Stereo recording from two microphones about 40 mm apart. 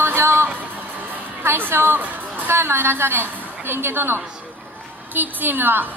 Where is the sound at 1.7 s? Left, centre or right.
Right.